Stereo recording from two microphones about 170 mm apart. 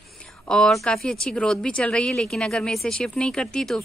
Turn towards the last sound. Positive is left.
turn(degrees=5)  # may be behind; listen again after turning